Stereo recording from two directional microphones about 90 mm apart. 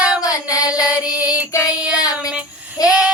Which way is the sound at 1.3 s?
40° left (ahead or behind).